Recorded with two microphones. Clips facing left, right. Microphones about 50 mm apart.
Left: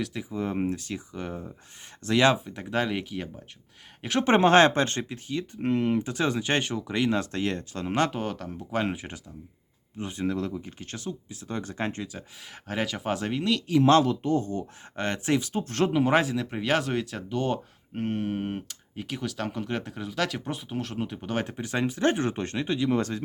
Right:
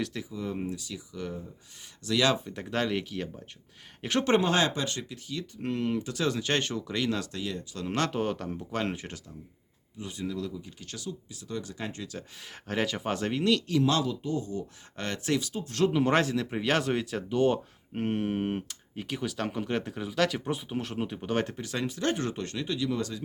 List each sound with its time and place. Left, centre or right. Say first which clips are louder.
0.0 s speech: left 1 dB; centre
0.3 s speech: left 5 dB; left
2.4 s speech: left 2 dB; centre
4.4 s speech: left 7 dB; left
7.3 s speech: left 6 dB; left
7.9 s speech: left 4 dB; centre
8.1 s speech: right 2 dB; centre
8.7 s speech: left 5 dB; centre
10.0 s speech: left 5 dB; left
12.6 s speech: left 1 dB; centre
13.8 s speech: left 7 dB; left
14.9 s speech: left 4 dB; left
15.9 s speech: left 3 dB; centre
21.5 s speech: left 4 dB; left